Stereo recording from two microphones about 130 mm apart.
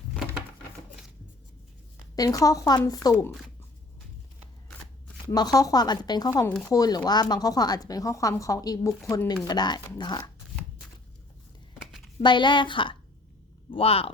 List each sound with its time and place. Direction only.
2.1 s speech: 30° left (ahead or behind)
5.3 s speech: 30° left (ahead or behind)
11.8 s a sound: centre (ahead or behind)
12.2 s a woman's voice: 35° left (ahead or behind)